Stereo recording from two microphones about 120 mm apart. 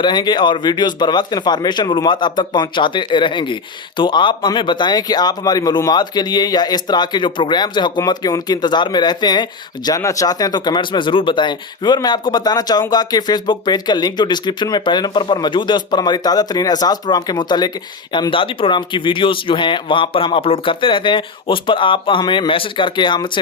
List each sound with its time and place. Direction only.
0.0 s speech: 35° left (ahead or behind)